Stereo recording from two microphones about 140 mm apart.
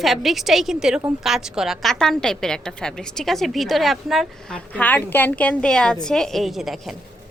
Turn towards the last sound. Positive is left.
turn(degrees=0)  # may be behind; listen again after turning